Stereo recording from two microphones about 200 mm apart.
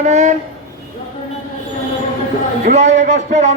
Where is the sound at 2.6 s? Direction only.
35° right (ahead or behind).